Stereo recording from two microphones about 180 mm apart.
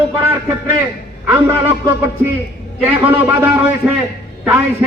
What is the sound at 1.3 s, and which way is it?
A man's voice, 15° right (ahead or behind).